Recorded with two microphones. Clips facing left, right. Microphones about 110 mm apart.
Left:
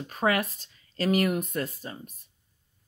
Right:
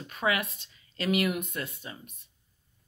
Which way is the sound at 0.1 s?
40° left (ahead or behind).